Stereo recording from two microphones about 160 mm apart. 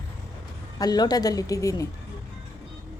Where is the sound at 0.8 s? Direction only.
25° left (ahead or behind).